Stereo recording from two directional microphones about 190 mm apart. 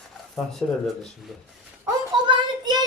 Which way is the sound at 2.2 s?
20° right (ahead or behind).